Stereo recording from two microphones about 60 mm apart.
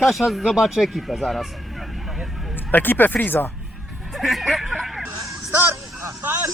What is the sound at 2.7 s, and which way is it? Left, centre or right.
Speech, left.